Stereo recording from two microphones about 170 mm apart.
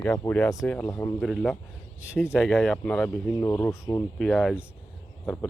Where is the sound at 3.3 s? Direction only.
20° left (ahead or behind).